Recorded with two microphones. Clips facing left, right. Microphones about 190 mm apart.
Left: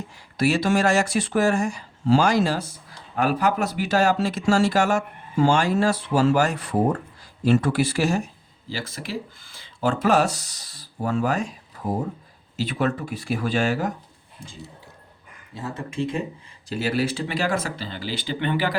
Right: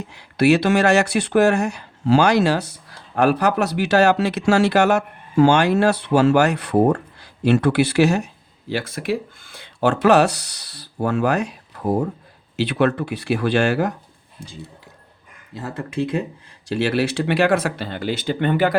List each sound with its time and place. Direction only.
0.1 s speech: 70° right (ahead or behind)
15.5 s speech: 70° right (ahead or behind); by 18.8 s 50° right (ahead or behind)